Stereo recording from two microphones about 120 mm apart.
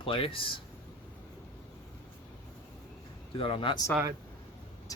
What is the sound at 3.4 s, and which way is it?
Speech, 45° left (ahead or behind).